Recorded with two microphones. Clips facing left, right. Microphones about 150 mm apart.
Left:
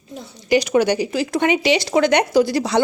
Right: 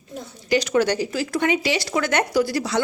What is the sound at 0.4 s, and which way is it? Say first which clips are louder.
Speech: left 3 dB; 15° left (ahead or behind).